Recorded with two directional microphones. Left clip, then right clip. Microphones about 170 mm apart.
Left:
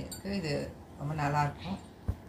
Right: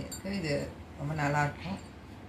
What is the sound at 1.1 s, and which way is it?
Speech, 15° left (ahead or behind).